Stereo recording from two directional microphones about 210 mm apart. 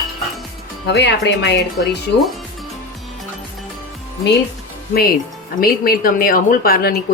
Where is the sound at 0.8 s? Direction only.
55° left (ahead or behind).